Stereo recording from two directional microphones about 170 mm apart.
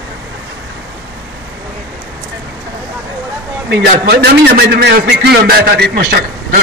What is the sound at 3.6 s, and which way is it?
A man's voice, 80° right.